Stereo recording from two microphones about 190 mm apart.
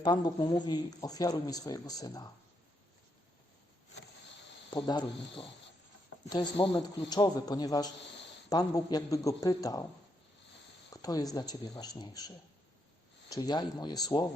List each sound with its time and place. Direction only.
0.0 s speech: 25° left (ahead or behind)
4.7 s speech: 25° left (ahead or behind)
10.9 s speech: 20° left (ahead or behind)
13.3 s speech: 20° left (ahead or behind)